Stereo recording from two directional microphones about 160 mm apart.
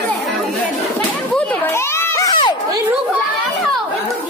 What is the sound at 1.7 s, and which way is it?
Children playing, 15° left (ahead or behind).